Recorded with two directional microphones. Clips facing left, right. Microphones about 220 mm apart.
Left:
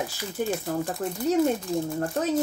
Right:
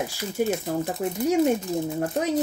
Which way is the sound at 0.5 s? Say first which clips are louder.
Right 2 dB; 20° right (ahead or behind).